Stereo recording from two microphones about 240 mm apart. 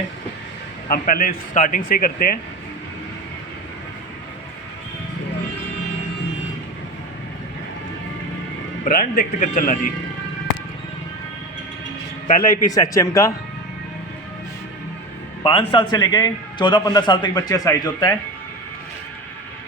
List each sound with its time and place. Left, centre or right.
0.9 s speech: left
8.8 s speech: left
12.6 s a man's voice: centre
15.4 s a man's voice: left